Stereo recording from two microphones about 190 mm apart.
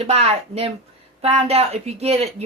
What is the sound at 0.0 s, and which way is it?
A woman's voice, 35° right (ahead or behind).